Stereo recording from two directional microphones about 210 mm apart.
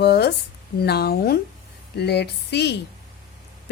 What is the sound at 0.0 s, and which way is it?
A woman's voice, 50° left (ahead or behind).